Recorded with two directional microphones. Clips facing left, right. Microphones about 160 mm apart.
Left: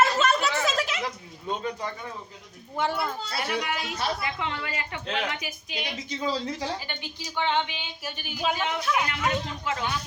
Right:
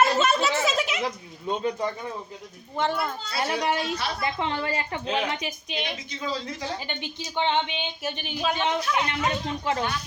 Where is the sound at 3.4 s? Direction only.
30° right (ahead or behind).